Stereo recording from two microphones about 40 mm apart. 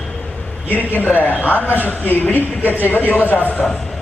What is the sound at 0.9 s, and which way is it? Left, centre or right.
Speech, left.